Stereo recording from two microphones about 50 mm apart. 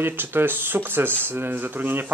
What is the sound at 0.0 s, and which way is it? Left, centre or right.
Speech, right.